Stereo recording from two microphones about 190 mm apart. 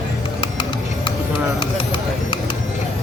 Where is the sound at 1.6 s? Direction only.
25° left (ahead or behind).